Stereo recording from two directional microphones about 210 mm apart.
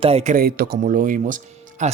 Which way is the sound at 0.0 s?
30° right (ahead or behind).